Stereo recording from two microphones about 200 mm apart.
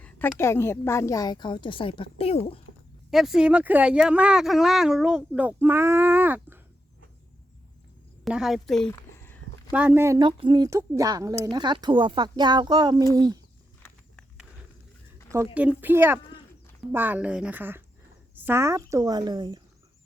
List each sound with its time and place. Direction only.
0.0 s a woman's voice: 10° left (ahead or behind); by 2.4 s 30° left (ahead or behind)
3.1 s speech: centre (ahead or behind)
8.2 s speech: centre (ahead or behind)
8.9 s a sound: 10° left (ahead or behind)
9.7 s speech: 10° right (ahead or behind)
15.5 s speech: 10° right (ahead or behind)